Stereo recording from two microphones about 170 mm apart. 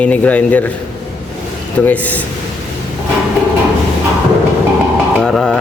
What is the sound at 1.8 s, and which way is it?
Speech, 10° left (ahead or behind).